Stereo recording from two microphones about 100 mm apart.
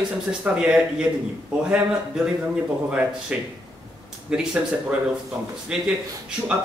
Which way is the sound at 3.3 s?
15° right (ahead or behind).